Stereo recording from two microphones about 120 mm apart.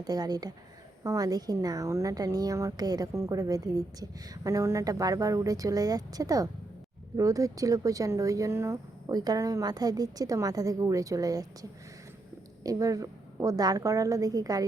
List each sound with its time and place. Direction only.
0.0 s a woman's voice: 35° right (ahead or behind)
12.6 s a woman's voice: 30° right (ahead or behind)